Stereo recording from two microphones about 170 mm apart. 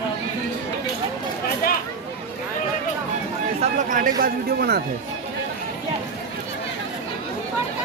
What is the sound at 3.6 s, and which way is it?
Speech, 50° right (ahead or behind).